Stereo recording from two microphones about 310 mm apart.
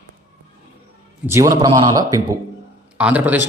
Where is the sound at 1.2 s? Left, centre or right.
Centre.